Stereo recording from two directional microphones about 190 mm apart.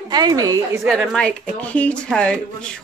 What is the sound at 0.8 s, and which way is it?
Speech, centre (ahead or behind).